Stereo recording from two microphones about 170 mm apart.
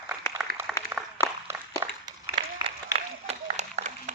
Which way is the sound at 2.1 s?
30° right (ahead or behind).